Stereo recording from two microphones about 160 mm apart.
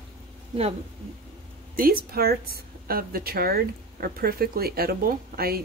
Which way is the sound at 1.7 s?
65° right (ahead or behind).